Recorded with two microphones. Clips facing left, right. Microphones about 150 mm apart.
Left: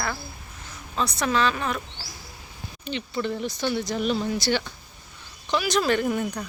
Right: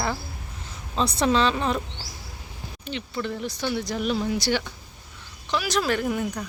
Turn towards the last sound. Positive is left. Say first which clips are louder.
# left 2 dB
turn(degrees=0)  # may be behind; listen again after turning